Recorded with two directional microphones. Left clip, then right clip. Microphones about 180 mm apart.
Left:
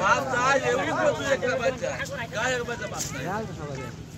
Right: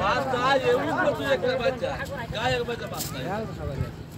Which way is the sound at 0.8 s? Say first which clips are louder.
Even; 65° right (ahead or behind).